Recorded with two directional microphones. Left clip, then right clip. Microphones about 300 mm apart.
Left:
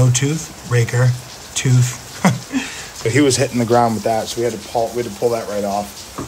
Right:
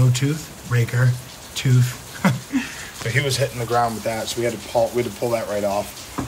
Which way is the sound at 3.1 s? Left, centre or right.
Left.